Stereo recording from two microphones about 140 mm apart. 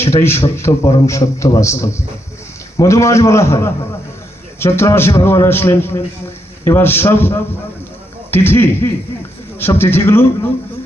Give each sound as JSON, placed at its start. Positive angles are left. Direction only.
{"t": 0.0, "sound": "a man's voice", "side_deg": 20}